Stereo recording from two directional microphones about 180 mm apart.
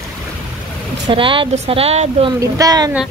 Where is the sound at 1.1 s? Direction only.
30° right (ahead or behind).